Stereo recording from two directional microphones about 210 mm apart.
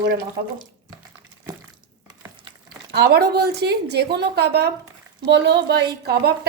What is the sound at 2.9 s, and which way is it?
A woman's voice, 50° right (ahead or behind).